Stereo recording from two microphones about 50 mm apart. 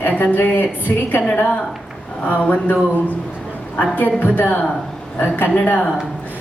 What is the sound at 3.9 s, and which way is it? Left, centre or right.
A woman's voice, left.